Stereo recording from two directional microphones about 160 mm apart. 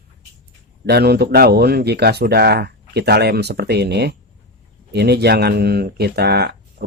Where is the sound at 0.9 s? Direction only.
90° right.